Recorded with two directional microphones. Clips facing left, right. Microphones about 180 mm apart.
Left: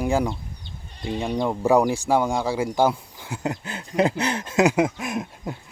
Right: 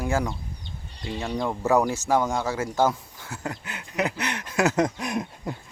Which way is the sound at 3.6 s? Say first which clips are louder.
Left 6 dB; 30° left (ahead or behind).